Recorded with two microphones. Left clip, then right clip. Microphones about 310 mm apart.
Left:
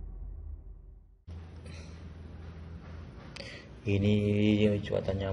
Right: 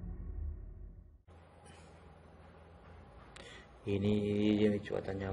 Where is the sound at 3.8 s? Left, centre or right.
Centre.